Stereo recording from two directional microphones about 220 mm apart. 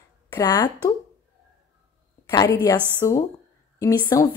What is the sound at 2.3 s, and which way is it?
A woman's voice, 15° left (ahead or behind).